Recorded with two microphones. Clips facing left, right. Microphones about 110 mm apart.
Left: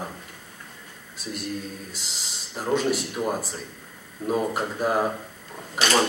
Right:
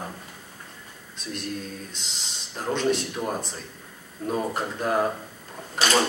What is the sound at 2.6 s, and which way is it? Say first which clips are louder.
A man's voice: left 1 dB; 5° left (ahead or behind).